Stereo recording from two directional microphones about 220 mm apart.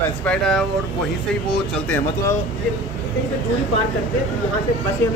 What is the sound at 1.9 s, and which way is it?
Speech, 10° left (ahead or behind).